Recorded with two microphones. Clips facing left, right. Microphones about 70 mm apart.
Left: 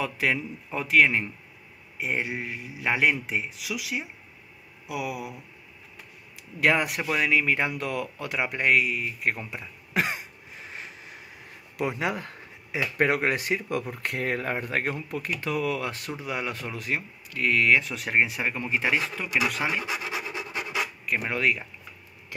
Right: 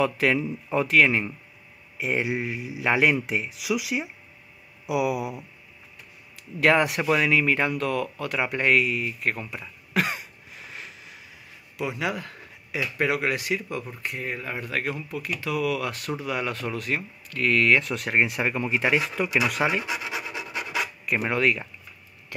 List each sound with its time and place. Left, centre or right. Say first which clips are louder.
0.0 s speech: right 4 dB; centre
0.4 s speech: right 7 dB; centre
0.8 s speech: left 1 dB; centre
2.2 s speech: right 5 dB; centre
2.8 s speech: right 3 dB; centre
6.6 s speech: right 3 dB; centre; by 11.1 s left
11.7 s a sound: even; left
12.8 s speech: left 1 dB; left
14.0 s speech: left 3 dB; left
14.6 s speech: even; left; by 19.8 s centre
19.9 s speech: right 1 dB; left
21.0 s speech: right 3 dB; centre
21.4 s speech: right 2 dB; centre